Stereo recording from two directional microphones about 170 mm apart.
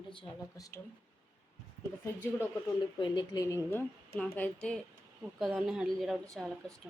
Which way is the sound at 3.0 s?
25° left (ahead or behind).